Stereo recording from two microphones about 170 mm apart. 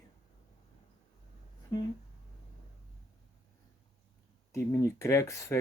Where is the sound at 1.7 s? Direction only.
20° left (ahead or behind).